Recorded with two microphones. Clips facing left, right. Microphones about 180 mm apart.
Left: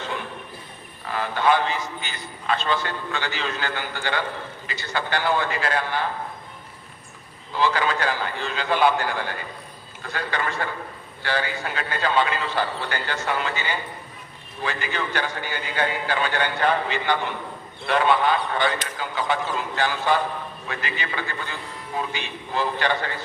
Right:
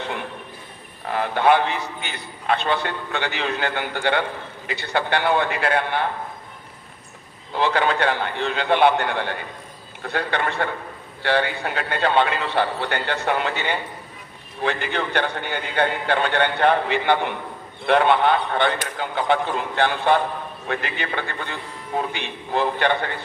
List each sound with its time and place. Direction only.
1.1 s a man's voice: 60° right (ahead or behind)
7.5 s a man's voice: 60° right (ahead or behind)